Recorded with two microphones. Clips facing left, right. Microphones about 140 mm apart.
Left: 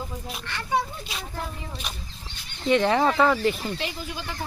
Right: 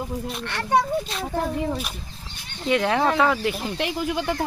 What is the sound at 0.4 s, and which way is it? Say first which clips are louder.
Speech: right 5 dB; 65° right (ahead or behind).